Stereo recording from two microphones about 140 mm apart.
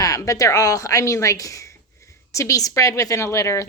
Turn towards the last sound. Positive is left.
turn(degrees=20)  # may be behind; listen again after turning